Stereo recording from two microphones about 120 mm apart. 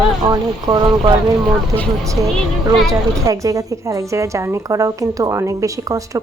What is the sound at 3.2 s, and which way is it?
Speech, 25° right (ahead or behind).